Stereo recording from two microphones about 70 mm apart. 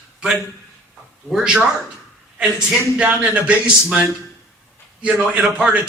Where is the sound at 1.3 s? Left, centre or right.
Centre.